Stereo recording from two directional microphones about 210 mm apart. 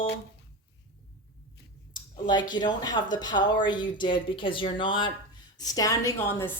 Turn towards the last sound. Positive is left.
turn(degrees=10)  # may be behind; listen again after turning